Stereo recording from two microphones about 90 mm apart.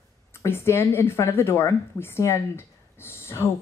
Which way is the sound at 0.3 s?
25° left (ahead or behind).